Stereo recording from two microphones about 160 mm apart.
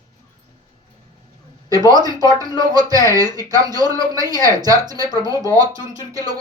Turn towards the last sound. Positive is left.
turn(degrees=-20)  # may be behind; listen again after turning